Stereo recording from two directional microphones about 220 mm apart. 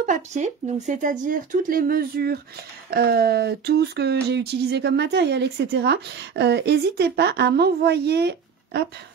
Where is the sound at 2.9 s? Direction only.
45° right (ahead or behind).